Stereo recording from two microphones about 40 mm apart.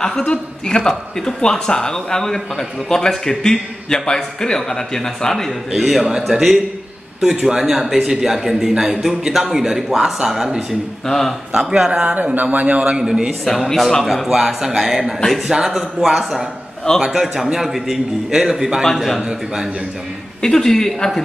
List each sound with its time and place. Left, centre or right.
0.3 s a man's voice: centre
5.5 s a man's voice: centre
11.1 s a man's voice: centre
11.5 s speech: centre
12.4 s a man's voice: right
12.9 s a man's voice: centre
13.7 s a man's voice: centre
18.9 s a man's voice: centre
19.2 s a man's voice: centre
20.4 s a man's voice: centre